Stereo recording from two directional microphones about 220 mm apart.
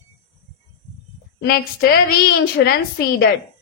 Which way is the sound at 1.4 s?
45° left (ahead or behind).